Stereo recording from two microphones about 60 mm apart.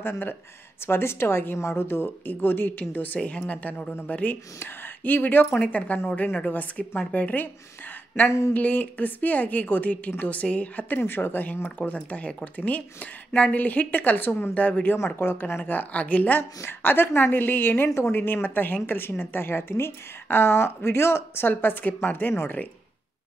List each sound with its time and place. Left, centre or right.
0.0 s a woman's voice: left
8.5 s a woman's voice: left
16.6 s a woman's voice: left